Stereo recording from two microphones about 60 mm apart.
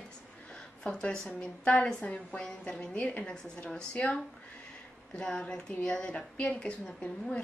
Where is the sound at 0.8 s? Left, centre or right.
Centre.